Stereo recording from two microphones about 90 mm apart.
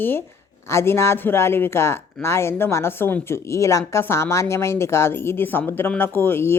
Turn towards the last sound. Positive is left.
turn(degrees=25)  # may be behind; listen again after turning